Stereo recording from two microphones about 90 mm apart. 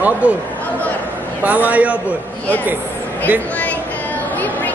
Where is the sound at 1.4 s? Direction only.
15° right (ahead or behind).